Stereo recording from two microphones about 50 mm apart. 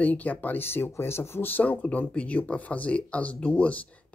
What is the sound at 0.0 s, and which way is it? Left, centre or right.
Speech, left.